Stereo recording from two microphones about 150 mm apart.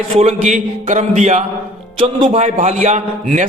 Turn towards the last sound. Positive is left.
turn(degrees=-55)  # may be behind; listen again after turning